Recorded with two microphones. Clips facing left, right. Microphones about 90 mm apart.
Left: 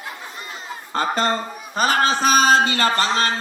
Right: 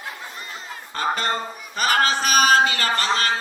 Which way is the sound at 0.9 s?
35° left (ahead or behind).